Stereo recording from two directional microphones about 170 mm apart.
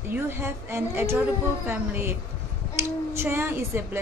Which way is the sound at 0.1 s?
15° right (ahead or behind).